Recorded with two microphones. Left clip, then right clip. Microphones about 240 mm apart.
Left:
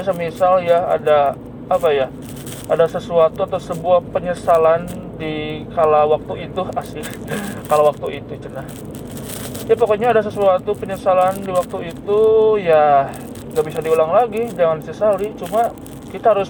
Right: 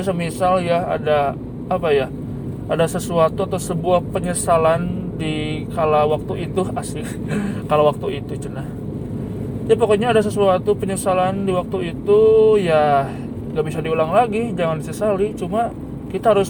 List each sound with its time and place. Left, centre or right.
0.0 s speech: right
7.3 s speech: right
9.6 s speech: right